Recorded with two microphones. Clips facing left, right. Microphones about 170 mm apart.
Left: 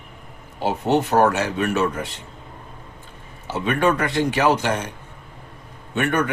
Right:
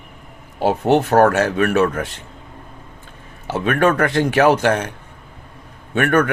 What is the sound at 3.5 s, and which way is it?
Speech, 60° right (ahead or behind).